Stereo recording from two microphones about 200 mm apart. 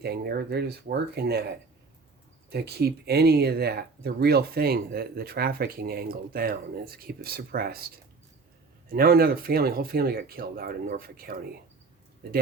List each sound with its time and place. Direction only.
0.0 s speech: 55° right (ahead or behind)
2.5 s speech: 55° right (ahead or behind)
8.9 s speech: 50° right (ahead or behind)